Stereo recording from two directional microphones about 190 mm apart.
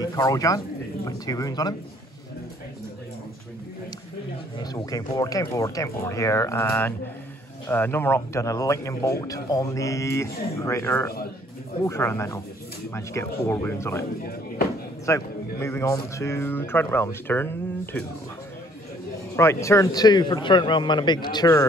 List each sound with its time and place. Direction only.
0.0 s a man's voice: 20° left (ahead or behind)
4.6 s a man's voice: 20° left (ahead or behind)
15.0 s speech: 15° left (ahead or behind)
19.3 s a man's voice: 15° left (ahead or behind)